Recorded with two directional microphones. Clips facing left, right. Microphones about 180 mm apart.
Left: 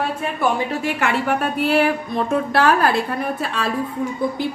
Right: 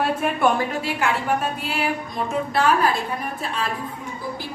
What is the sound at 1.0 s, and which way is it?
A woman's voice, 65° left (ahead or behind).